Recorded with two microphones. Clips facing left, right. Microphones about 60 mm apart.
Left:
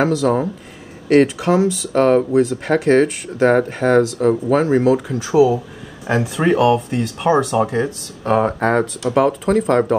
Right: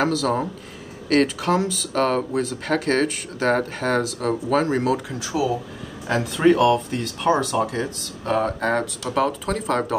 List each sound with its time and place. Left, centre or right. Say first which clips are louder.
0.0 s speech: left 5 dB; centre
5.3 s speech: left 10 dB; centre
9.0 s speech: left 6 dB; centre